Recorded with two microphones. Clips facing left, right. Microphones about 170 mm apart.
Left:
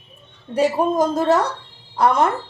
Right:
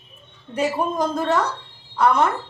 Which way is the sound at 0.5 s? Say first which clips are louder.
Left 5 dB; 35° left (ahead or behind).